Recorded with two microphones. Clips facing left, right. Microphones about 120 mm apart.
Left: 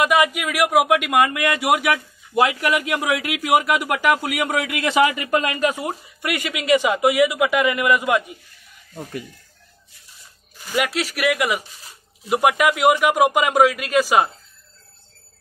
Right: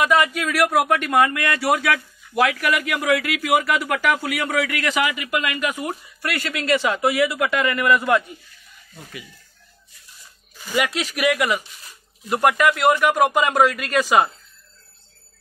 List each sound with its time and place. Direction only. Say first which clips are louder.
0.0 s speech: left 1 dB; 10° left (ahead or behind)
8.9 s speech: left 8 dB; 45° left (ahead or behind)
10.8 s speech: even; 5° left (ahead or behind)